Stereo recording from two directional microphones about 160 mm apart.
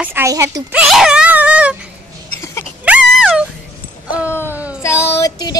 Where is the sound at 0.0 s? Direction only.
15° right (ahead or behind).